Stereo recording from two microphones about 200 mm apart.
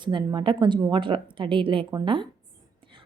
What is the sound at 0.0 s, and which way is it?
A woman's voice, 20° right (ahead or behind).